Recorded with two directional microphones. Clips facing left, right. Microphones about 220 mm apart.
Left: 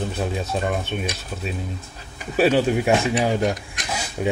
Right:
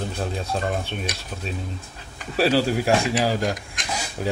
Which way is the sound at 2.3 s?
Centre (ahead or behind).